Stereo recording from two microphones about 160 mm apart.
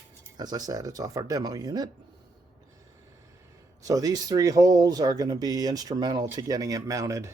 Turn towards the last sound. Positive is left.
turn(degrees=-20)  # may be behind; listen again after turning